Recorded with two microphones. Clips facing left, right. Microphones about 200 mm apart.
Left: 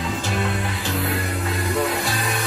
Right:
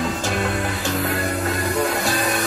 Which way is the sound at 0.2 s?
45° right (ahead or behind).